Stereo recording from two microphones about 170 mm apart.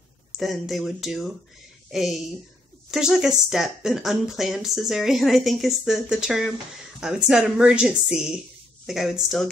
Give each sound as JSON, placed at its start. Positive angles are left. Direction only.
{"t": 0.4, "sound": "speech", "side_deg": 0}